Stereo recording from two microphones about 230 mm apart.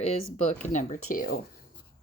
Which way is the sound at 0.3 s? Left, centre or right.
Left.